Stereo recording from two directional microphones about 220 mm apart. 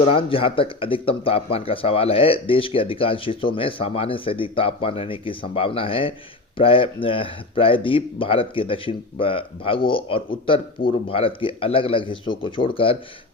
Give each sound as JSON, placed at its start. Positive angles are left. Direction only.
{"t": 0.1, "sound": "speech", "side_deg": 25}